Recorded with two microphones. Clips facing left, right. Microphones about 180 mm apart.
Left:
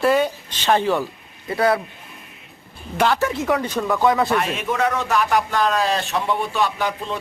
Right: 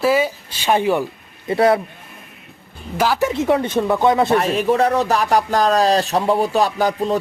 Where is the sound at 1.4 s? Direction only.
25° right (ahead or behind).